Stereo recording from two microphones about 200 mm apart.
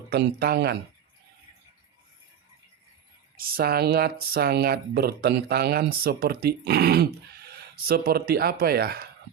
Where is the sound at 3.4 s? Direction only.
50° right (ahead or behind).